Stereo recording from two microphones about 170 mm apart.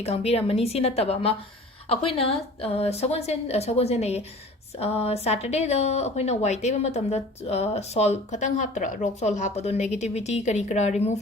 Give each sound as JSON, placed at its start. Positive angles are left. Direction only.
{"t": 0.0, "sound": "speech", "side_deg": 40}